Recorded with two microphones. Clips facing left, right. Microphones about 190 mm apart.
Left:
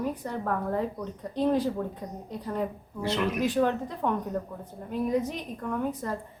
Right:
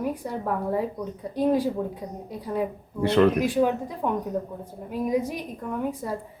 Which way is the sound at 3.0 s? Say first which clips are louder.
Right 9 dB; 60° right (ahead or behind).